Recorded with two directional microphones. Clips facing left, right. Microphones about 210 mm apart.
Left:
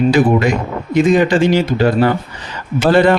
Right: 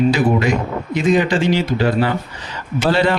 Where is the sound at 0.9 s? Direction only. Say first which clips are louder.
Left 4 dB; 45° left (ahead or behind).